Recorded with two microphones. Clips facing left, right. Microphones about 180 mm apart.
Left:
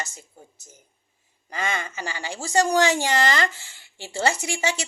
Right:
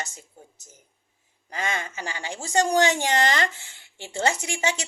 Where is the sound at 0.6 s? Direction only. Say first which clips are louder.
Left 2 dB; 20° left (ahead or behind).